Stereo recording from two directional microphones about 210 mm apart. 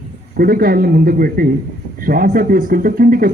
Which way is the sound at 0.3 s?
45° right (ahead or behind).